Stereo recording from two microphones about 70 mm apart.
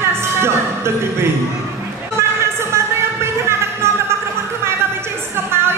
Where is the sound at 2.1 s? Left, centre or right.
Right.